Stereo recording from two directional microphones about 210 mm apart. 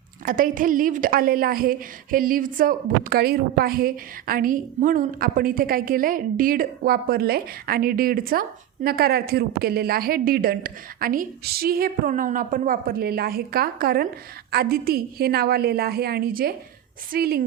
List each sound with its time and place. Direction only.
0.3 s a woman's voice: 40° right (ahead or behind)